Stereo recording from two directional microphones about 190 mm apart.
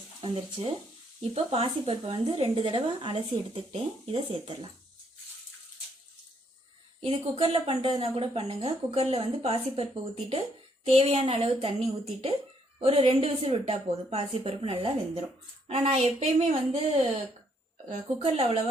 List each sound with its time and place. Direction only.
0.2 s speech: 30° right (ahead or behind)
7.0 s speech: 30° right (ahead or behind)
18.2 s speech: 30° right (ahead or behind)